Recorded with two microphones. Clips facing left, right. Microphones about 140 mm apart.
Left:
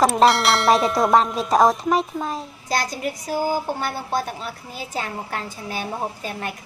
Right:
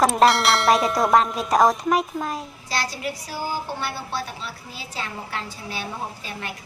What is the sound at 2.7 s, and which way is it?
A woman's voice, 45° left (ahead or behind).